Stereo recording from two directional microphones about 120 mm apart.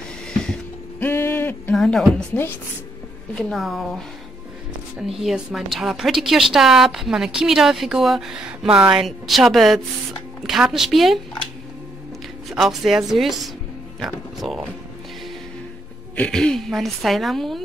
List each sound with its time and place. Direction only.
0.3 s mechanisms: 5° left (ahead or behind)
1.0 s a sound: 15° left (ahead or behind)
1.8 s a woman's voice: 5° left (ahead or behind)
3.3 s a woman's voice: centre (ahead or behind)
4.9 s a woman's voice: 5° right (ahead or behind)
12.4 s a woman's voice: centre (ahead or behind)
16.2 s a woman's voice: 5° left (ahead or behind)